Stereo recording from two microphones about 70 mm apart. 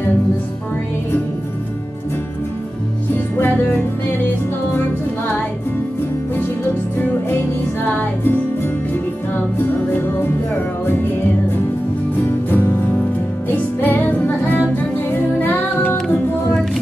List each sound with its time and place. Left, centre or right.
3.3 s music: left
7.8 s music: left
9.6 s music: left
12.4 s music: left